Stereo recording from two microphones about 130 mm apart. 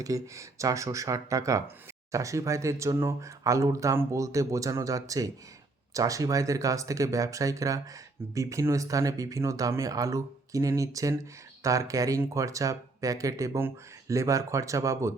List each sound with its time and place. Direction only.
0.0 s speech: 25° right (ahead or behind)